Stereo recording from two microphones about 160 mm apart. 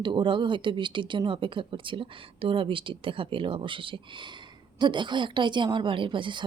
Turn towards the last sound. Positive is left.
turn(degrees=-30)  # may be behind; listen again after turning